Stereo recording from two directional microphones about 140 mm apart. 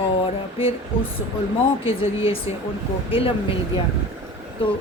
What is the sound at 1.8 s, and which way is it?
A woman's voice, 40° left (ahead or behind).